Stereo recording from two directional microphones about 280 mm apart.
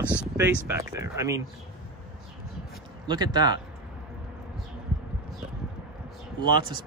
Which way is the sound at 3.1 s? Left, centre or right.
Centre.